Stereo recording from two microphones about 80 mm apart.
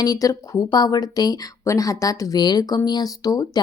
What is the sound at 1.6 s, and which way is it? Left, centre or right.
A woman's voice, left.